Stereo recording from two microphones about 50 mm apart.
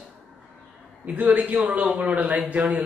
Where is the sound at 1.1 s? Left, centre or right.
Right.